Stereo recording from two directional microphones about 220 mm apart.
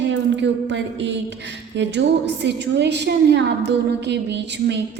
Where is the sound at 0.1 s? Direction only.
55° right (ahead or behind).